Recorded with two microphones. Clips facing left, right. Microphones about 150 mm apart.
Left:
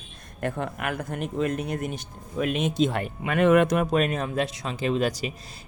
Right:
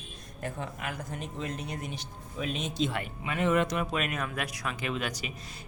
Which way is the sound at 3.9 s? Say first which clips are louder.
Left 8 dB; 30° left (ahead or behind).